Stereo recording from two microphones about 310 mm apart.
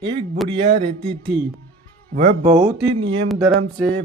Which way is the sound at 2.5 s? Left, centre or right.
Centre.